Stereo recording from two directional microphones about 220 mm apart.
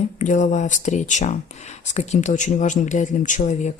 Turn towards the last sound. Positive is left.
turn(degrees=35)  # may be behind; listen again after turning